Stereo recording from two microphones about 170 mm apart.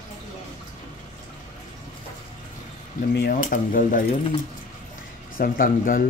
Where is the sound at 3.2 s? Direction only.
60° left (ahead or behind).